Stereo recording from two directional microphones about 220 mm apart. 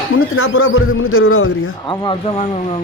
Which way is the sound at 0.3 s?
70° left (ahead or behind).